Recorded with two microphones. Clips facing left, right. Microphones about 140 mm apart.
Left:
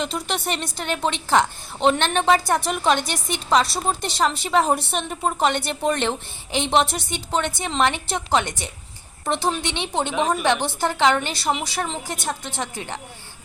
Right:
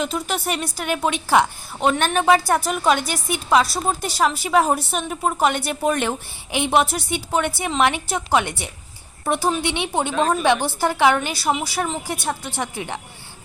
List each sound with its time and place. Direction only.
0.0 s a woman's voice: 5° right (ahead or behind)
10.1 s a woman's voice: 15° left (ahead or behind)
10.4 s a woman's voice: 15° right (ahead or behind)